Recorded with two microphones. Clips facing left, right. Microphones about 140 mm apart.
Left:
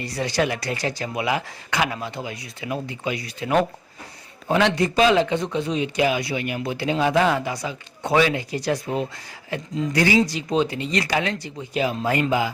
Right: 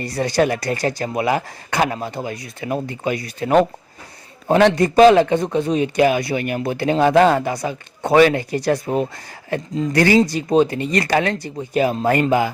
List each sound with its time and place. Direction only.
0.0 s a man's voice: 50° right (ahead or behind)